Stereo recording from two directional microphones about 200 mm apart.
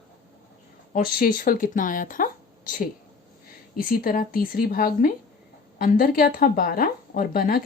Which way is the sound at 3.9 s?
45° left (ahead or behind).